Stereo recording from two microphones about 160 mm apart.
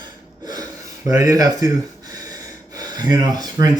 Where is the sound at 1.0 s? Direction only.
20° right (ahead or behind).